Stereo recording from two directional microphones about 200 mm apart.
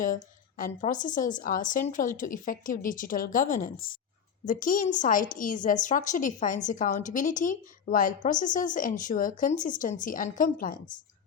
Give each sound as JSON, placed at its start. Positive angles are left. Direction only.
{"t": 0.5, "sound": "a woman's voice", "side_deg": 40}